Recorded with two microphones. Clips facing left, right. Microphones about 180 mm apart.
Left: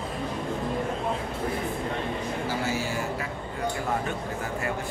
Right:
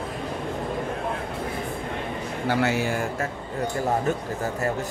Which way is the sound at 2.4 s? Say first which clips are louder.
Right 9 dB; 65° right (ahead or behind).